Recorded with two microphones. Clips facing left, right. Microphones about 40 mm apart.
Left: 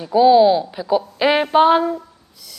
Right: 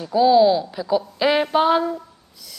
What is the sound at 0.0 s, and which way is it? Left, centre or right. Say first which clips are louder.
Speech: left 3 dB; centre.